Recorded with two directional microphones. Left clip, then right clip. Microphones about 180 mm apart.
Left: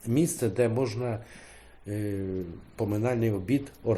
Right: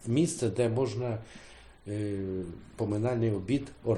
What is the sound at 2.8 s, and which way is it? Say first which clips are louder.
Speech: left 2 dB; 30° left (ahead or behind).